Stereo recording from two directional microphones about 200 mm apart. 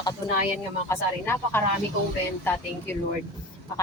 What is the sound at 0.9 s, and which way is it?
Speech, 10° left (ahead or behind).